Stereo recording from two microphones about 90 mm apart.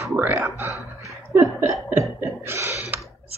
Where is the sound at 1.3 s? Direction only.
25° right (ahead or behind).